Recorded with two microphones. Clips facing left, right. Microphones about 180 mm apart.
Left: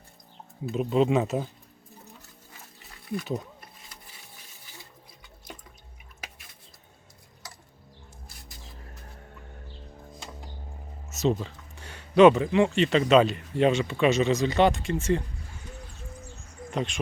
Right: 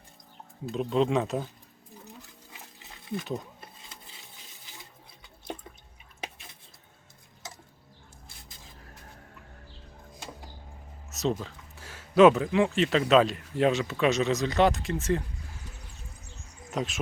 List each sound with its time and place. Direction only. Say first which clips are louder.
0.7 s speech: left 2 dB; 5° left (ahead or behind)
2.5 s a sound: right 1 dB; 20° right (ahead or behind)
11.1 s speech: left 3 dB; centre (ahead or behind)
16.7 s speech: left 1 dB; 5° right (ahead or behind)